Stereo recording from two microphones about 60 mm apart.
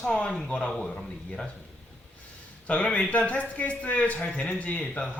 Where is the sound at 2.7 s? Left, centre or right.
Left.